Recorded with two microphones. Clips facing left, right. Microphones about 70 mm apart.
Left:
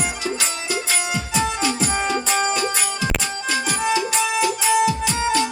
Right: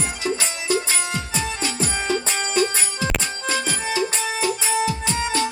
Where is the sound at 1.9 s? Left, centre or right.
Left.